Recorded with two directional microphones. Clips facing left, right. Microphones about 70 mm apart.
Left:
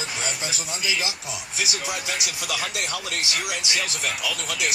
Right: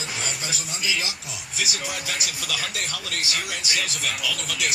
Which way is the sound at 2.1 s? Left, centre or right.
Left.